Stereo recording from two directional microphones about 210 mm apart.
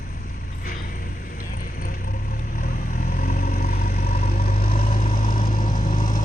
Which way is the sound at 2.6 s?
40° left (ahead or behind).